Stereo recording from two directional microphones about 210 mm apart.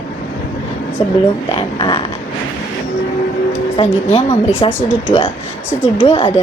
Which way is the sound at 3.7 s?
30° left (ahead or behind).